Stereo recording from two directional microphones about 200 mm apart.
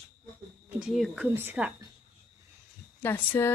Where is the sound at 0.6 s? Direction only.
5° right (ahead or behind).